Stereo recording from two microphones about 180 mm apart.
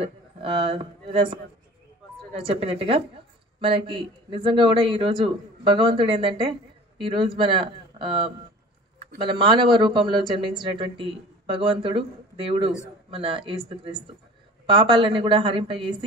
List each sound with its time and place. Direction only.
0.0 s a man's voice: 30° right (ahead or behind)